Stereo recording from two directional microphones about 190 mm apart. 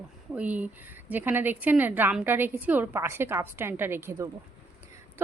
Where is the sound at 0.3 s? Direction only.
5° right (ahead or behind).